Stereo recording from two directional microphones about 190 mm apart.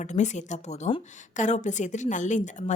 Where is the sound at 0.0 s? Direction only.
40° left (ahead or behind).